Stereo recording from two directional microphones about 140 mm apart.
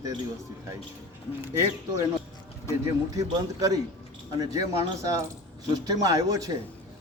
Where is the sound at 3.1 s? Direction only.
25° right (ahead or behind).